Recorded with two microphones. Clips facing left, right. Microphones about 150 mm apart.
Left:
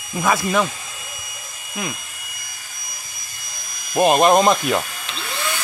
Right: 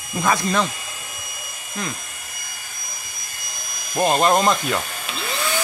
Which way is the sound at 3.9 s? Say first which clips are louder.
Left 4 dB; 15° left (ahead or behind).